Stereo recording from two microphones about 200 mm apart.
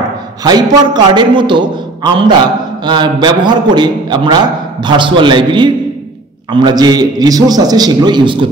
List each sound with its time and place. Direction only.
0.4 s a man's voice: 20° right (ahead or behind)